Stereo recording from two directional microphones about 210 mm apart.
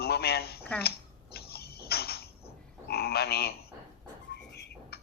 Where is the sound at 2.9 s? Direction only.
50° left (ahead or behind).